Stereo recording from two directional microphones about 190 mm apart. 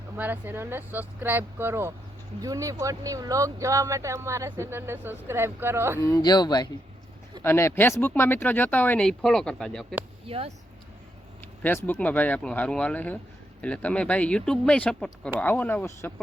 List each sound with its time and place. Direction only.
0.2 s speech: 10° right (ahead or behind)
6.0 s speech: 20° left (ahead or behind)
10.2 s speech: 30° right (ahead or behind)
11.9 s speech: 10° left (ahead or behind)